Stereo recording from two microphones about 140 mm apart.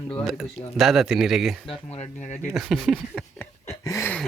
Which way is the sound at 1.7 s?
50° left (ahead or behind).